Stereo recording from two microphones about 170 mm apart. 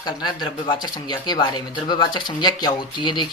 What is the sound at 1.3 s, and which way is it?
Speech, 25° left (ahead or behind).